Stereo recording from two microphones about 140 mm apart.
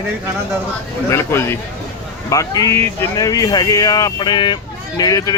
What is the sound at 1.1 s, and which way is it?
Speech, 20° left (ahead or behind).